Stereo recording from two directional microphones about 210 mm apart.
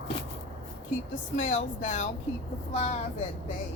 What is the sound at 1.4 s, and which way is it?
Speech, 40° left (ahead or behind).